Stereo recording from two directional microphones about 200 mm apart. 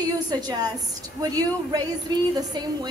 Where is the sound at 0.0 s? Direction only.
20° right (ahead or behind).